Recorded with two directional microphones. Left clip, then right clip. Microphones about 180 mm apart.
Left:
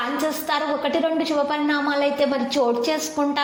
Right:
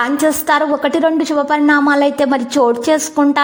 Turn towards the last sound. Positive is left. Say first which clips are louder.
# right 9 dB
turn(degrees=-50)  # may be behind; listen again after turning